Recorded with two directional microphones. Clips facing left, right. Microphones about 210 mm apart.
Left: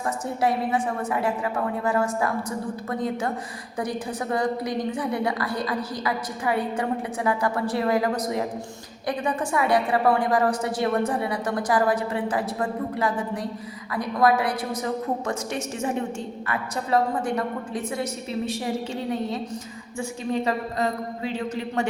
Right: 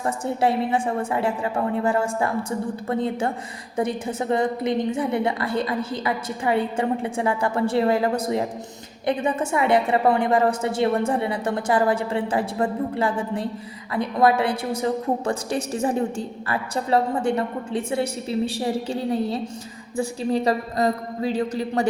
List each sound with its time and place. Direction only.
0.0 s a woman's voice: 30° right (ahead or behind)